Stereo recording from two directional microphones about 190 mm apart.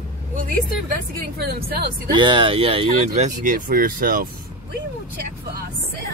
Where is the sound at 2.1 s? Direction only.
25° right (ahead or behind); by 4.3 s 45° right (ahead or behind).